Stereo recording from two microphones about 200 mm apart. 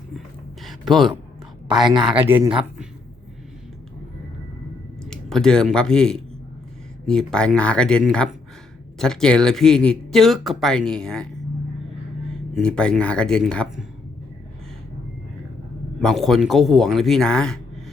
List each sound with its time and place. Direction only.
0.6 s a sound: centre (ahead or behind)
1.6 s a woman's voice: centre (ahead or behind)
5.0 s speech: centre (ahead or behind)
12.5 s speech: 5° left (ahead or behind)
16.0 s speech: centre (ahead or behind)